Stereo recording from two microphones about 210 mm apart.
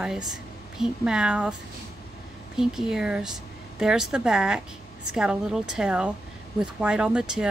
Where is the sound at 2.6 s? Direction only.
Centre (ahead or behind).